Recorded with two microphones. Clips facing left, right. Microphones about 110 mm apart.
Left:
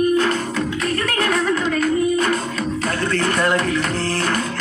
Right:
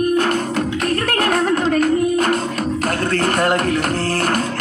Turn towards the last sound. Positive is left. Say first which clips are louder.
# right 2 dB
turn(degrees=-50)  # may be behind; listen again after turning